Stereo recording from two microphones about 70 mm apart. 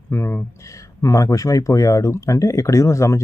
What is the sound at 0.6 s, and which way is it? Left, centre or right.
Speech, left.